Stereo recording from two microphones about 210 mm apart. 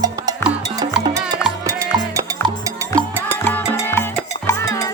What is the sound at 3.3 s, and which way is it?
Music, 10° left (ahead or behind).